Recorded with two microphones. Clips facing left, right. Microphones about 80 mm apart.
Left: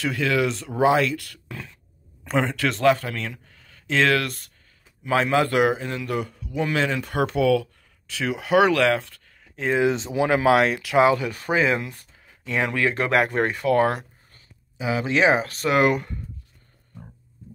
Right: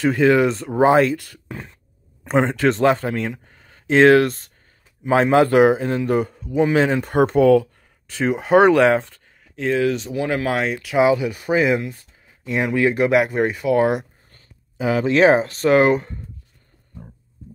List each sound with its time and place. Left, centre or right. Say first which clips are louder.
0.0 s a man's voice: right 7 dB; right
2.2 s a man's voice: right 6 dB; right
9.8 s speech: left 1 dB; left; by 14.0 s centre
14.3 s a sound: right 3 dB; right
15.4 s a man's voice: right 5 dB; right